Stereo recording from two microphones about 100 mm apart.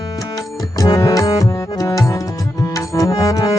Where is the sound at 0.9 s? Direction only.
35° left (ahead or behind).